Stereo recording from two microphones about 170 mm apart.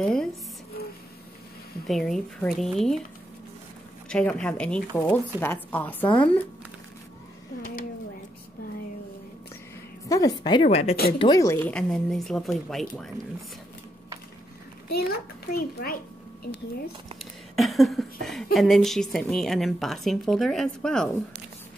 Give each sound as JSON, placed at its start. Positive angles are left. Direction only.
{"t": 0.0, "sound": "speech", "side_deg": 5}
{"t": 1.9, "sound": "a woman's voice", "side_deg": 0}
{"t": 4.1, "sound": "speech", "side_deg": 5}
{"t": 10.0, "sound": "a woman's voice", "side_deg": 20}
{"t": 11.1, "sound": "a woman's voice", "side_deg": 25}
{"t": 11.6, "sound": "a woman's voice", "side_deg": 5}
{"t": 15.0, "sound": "a child's voice", "side_deg": 60}
{"t": 17.2, "sound": "a sound", "side_deg": 0}
{"t": 18.2, "sound": "a woman's voice", "side_deg": 0}